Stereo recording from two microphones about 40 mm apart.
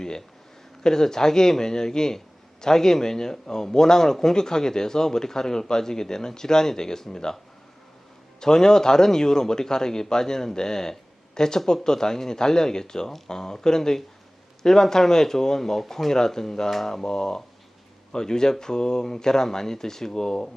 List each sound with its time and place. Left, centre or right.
0.0 s a sound: centre
0.8 s a man's voice: centre
8.4 s a man's voice: centre